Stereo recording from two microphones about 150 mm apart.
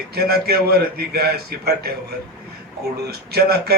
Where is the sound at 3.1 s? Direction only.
90° right.